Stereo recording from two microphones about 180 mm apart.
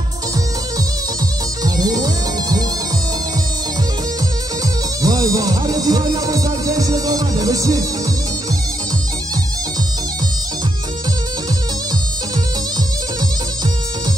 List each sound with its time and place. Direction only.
1.6 s music: 20° right (ahead or behind)
5.0 s music: 20° right (ahead or behind)